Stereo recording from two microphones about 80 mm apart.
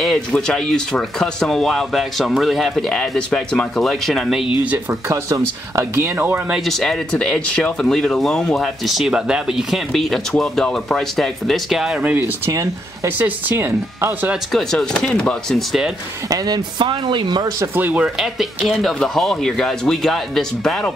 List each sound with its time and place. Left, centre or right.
0.0 s speech: centre
5.0 s speech: right
6.5 s speech: centre
12.0 s speech: right
12.4 s speech: right
13.2 s speech: right
14.5 s speech: centre
16.3 s speech: right
17.7 s speech: right
18.0 s speech: centre